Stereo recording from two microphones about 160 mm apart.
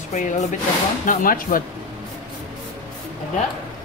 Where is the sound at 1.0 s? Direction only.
60° left (ahead or behind).